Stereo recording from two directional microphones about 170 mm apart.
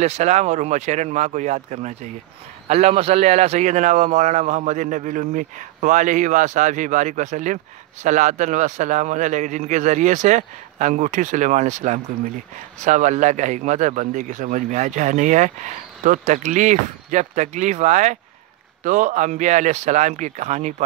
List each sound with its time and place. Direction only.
0.0 s a man's voice: 40° right (ahead or behind)